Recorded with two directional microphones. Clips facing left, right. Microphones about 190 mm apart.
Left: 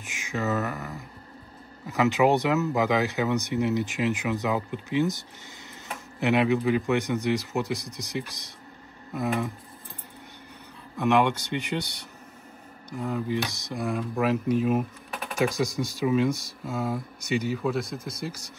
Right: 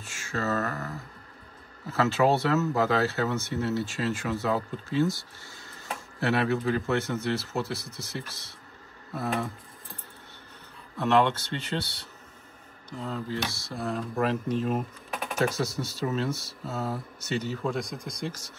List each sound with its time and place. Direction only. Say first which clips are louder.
0.0 s a sound: left 2 dB; 15° left (ahead or behind)
1.9 s speech: left 2 dB; 15° left (ahead or behind)
11.0 s speech: left 1 dB; 15° left (ahead or behind)